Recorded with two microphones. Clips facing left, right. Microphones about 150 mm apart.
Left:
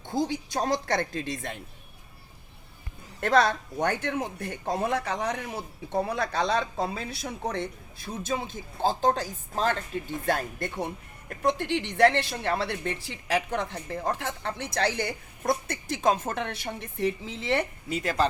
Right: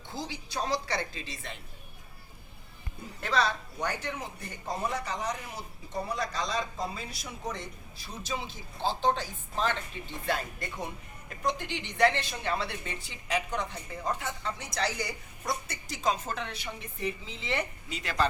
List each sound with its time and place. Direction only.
0.1 s speech: 45° left (ahead or behind)
3.2 s a woman's voice: 50° left (ahead or behind)